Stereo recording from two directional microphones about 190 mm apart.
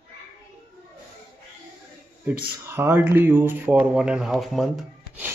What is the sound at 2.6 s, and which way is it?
Speech, 10° right (ahead or behind).